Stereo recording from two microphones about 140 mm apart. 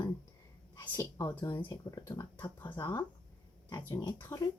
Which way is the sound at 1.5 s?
30° left (ahead or behind).